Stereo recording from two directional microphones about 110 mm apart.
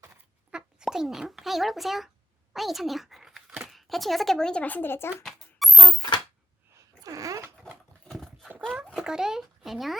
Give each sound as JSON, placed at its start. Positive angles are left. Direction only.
{"t": 0.5, "sound": "a child's voice", "side_deg": -5}
{"t": 2.5, "sound": "a sound", "side_deg": 0}
{"t": 3.7, "sound": "speech", "side_deg": 0}
{"t": 5.2, "sound": "music", "side_deg": 0}
{"t": 7.0, "sound": "a sound", "side_deg": -30}
{"t": 8.0, "sound": "horse", "side_deg": 5}
{"t": 9.0, "sound": "speech", "side_deg": -5}